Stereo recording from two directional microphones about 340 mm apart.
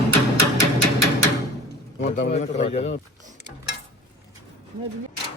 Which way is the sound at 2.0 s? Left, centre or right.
Left.